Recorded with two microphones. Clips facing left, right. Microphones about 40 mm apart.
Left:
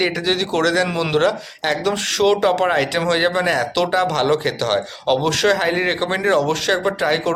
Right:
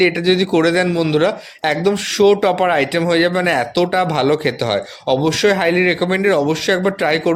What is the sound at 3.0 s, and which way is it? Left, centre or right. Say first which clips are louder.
Speech: right 3 dB; centre.